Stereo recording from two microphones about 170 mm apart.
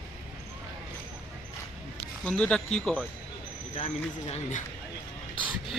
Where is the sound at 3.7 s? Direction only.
40° left (ahead or behind).